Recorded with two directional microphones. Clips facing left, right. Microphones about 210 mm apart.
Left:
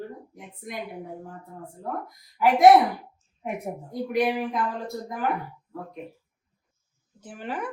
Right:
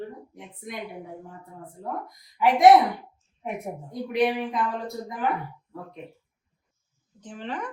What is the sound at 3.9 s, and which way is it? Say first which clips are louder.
Speech: even; centre (ahead or behind).